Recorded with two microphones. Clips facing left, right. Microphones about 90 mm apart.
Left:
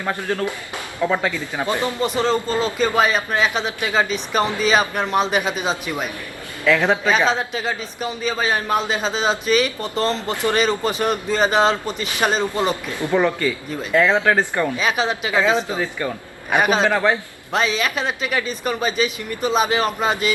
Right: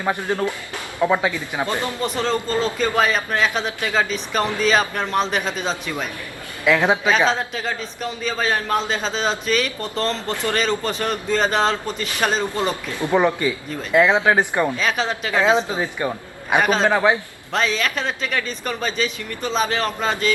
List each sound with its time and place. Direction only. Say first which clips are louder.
0.0 s speech: right 1 dB; 15° right (ahead or behind)
1.6 s speech: left 3 dB; 20° left (ahead or behind)
2.0 s speech: left 3 dB; 5° left (ahead or behind)
6.7 s speech: even; 15° right (ahead or behind)
7.3 s speech: left 1 dB; 5° left (ahead or behind)
13.0 s a man's voice: right 1 dB; 20° right (ahead or behind)
14.8 s speech: left 1 dB; 5° left (ahead or behind)
15.4 s a man's voice: right 1 dB; 20° right (ahead or behind)
16.6 s speech: left 1 dB; 5° left (ahead or behind)
16.9 s speech: right 1 dB; 15° right (ahead or behind)
17.5 s speech: left 1 dB; 5° left (ahead or behind)